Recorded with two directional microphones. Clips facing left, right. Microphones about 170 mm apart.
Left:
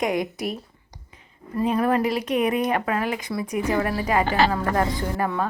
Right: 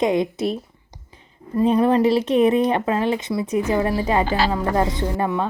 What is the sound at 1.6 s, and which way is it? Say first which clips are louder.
Speech: right 5 dB; 25° right (ahead or behind).